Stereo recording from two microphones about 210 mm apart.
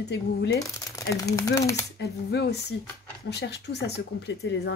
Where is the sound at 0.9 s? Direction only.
15° left (ahead or behind).